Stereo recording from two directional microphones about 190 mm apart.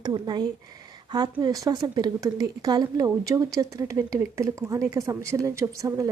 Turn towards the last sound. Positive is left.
turn(degrees=-20)  # may be behind; listen again after turning